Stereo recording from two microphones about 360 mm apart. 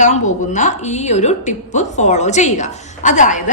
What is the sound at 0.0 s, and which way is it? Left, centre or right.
A woman's voice, centre.